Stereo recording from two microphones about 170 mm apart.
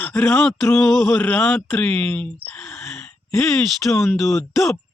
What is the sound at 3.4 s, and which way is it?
Speech, centre (ahead or behind).